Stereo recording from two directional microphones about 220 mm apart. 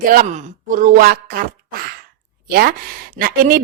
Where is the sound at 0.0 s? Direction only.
40° right (ahead or behind).